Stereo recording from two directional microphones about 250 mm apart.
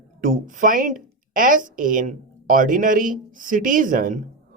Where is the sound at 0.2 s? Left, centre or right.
Right.